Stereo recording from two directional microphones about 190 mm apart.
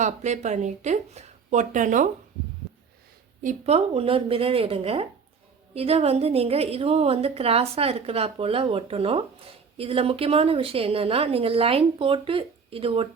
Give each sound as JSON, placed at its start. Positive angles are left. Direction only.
{"t": 0.0, "sound": "a woman's voice", "side_deg": -40}
{"t": 3.4, "sound": "a woman's voice", "side_deg": -35}